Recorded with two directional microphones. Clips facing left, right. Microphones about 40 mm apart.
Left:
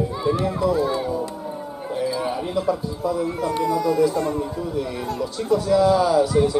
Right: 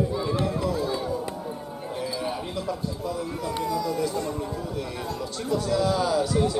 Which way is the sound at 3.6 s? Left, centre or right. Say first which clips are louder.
Left 6 dB; left.